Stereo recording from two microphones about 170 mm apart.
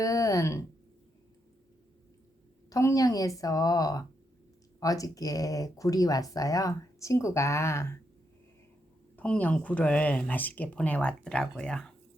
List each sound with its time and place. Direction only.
0.0 s speech: 20° left (ahead or behind)
2.6 s speech: 20° left (ahead or behind)
9.1 s speech: 5° left (ahead or behind)